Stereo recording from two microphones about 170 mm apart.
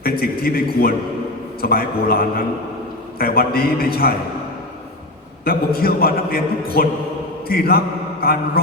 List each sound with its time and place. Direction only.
0.0 s a man's voice: 60° left (ahead or behind)
5.5 s a man's voice: 60° left (ahead or behind)
7.4 s mantra: 60° left (ahead or behind)
8.2 s a man's voice: 60° left (ahead or behind)